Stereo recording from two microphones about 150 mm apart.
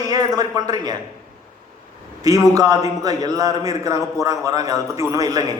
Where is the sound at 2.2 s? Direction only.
20° right (ahead or behind).